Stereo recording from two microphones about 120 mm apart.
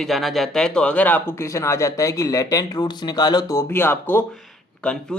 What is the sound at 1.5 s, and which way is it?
Speech, 25° left (ahead or behind).